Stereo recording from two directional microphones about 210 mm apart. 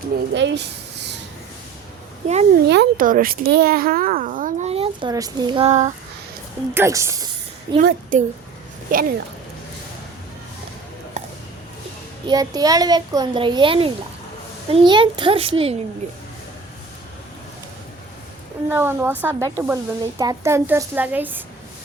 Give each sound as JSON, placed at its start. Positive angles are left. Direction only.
{"t": 0.3, "sound": "speech", "side_deg": -55}
{"t": 2.2, "sound": "a child's voice", "side_deg": -30}
{"t": 2.6, "sound": "a child's voice", "side_deg": -50}
{"t": 6.7, "sound": "snake", "side_deg": -15}
{"t": 7.8, "sound": "a woman's voice", "side_deg": -45}
{"t": 11.2, "sound": "a sound", "side_deg": -35}
{"t": 12.3, "sound": "a child's voice", "side_deg": -20}
{"t": 18.7, "sound": "speech", "side_deg": -10}